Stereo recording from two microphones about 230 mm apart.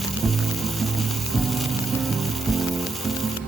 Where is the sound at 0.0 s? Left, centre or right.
Centre.